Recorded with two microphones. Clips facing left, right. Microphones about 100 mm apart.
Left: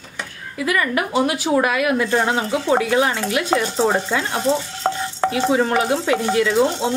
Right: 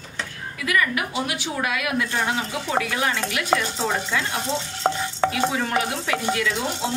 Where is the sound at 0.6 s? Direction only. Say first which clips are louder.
Left 3 dB; 35° left (ahead or behind).